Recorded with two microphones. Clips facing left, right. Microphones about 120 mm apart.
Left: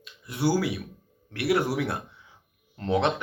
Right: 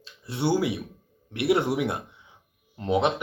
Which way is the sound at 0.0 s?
30° right (ahead or behind).